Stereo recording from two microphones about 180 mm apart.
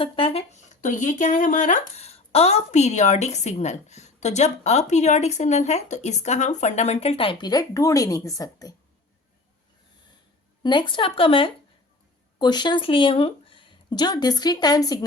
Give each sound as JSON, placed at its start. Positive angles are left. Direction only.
{"t": 0.0, "sound": "speech", "side_deg": 30}
{"t": 10.6, "sound": "speech", "side_deg": 25}